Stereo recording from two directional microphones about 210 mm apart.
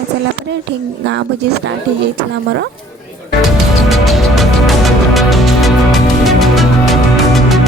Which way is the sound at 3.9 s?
Centre (ahead or behind).